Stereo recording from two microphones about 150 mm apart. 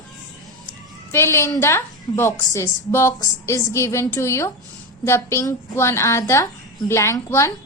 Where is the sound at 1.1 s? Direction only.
15° left (ahead or behind).